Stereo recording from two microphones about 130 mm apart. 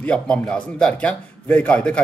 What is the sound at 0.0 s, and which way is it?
A man's voice, 5° left (ahead or behind).